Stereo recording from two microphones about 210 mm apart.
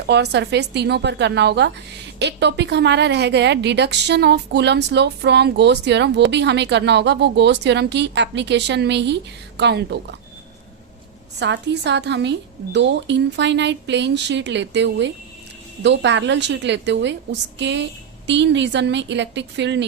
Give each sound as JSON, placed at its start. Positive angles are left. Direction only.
{"t": 0.1, "sound": "a woman's voice", "side_deg": -55}
{"t": 11.3, "sound": "a woman's voice", "side_deg": -55}